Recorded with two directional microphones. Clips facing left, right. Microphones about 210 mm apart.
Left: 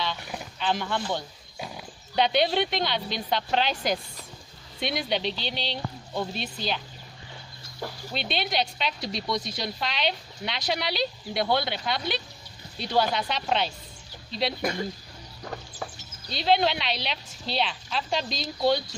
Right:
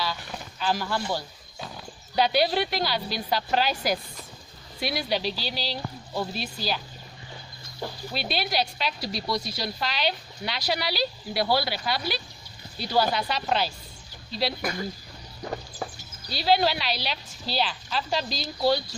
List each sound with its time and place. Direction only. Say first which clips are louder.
0.6 s speech: right 1 dB; 5° right (ahead or behind)
2.1 s a woman's voice: even; 5° right (ahead or behind)
8.1 s a woman's voice: even; 5° right (ahead or behind)
14.6 s speech: left 2 dB; 25° left (ahead or behind)
16.3 s a woman's voice: even; 5° right (ahead or behind)